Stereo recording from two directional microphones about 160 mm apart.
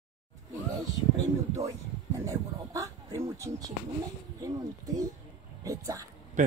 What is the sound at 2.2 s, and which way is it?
Speech, 20° right (ahead or behind).